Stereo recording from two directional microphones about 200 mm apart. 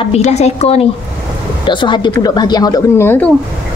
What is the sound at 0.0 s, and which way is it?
A woman's voice, 35° left (ahead or behind).